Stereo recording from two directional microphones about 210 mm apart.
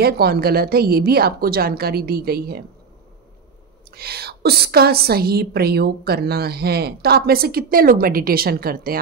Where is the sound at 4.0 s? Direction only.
50° right (ahead or behind).